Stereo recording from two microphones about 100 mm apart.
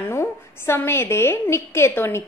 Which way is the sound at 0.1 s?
25° left (ahead or behind).